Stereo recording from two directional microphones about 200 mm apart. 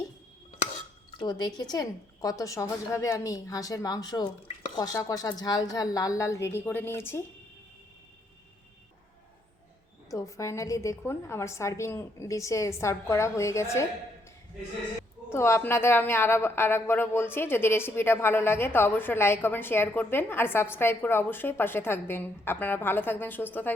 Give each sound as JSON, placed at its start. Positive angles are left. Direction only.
{"t": 1.2, "sound": "speech", "side_deg": 20}
{"t": 10.1, "sound": "speech", "side_deg": 15}
{"t": 15.3, "sound": "speech", "side_deg": 10}